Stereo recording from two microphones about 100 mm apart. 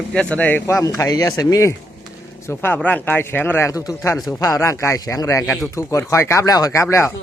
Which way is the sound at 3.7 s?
35° left (ahead or behind).